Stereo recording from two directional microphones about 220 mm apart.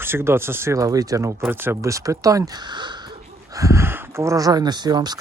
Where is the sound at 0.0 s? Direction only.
10° right (ahead or behind).